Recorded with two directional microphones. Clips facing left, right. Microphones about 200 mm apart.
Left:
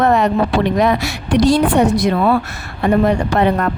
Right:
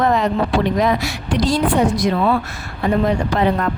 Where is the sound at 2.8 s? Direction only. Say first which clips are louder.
Left 3 dB; 70° left (ahead or behind).